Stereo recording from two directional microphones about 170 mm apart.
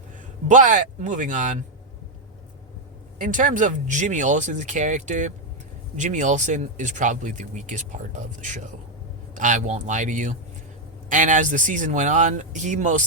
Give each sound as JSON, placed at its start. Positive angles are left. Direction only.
{"t": 0.4, "sound": "speech", "side_deg": -50}
{"t": 3.2, "sound": "speech", "side_deg": -50}